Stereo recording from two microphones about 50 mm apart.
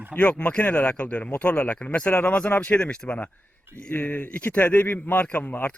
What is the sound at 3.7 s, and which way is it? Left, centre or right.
Speech, right.